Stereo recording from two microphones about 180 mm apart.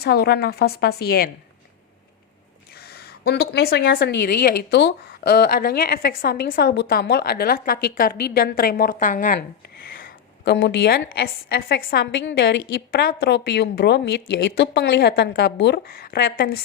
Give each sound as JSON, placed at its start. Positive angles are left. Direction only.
{"t": 0.0, "sound": "speech", "side_deg": 60}
{"t": 2.7, "sound": "speech", "side_deg": 60}
{"t": 10.0, "sound": "speech", "side_deg": 60}
{"t": 12.9, "sound": "speech", "side_deg": 60}